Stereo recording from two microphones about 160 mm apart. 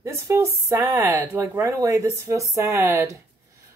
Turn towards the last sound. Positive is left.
turn(degrees=-20)  # may be behind; listen again after turning